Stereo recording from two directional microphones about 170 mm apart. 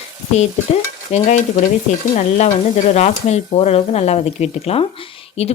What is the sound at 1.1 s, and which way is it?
Stir, 45° left (ahead or behind).